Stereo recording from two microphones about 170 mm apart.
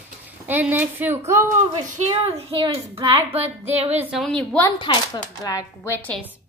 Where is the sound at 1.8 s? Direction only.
40° right (ahead or behind).